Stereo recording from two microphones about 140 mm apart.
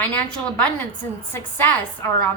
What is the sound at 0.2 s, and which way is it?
A woman's voice, 10° left (ahead or behind).